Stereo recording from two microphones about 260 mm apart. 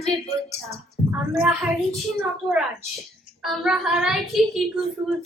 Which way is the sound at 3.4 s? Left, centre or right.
Centre.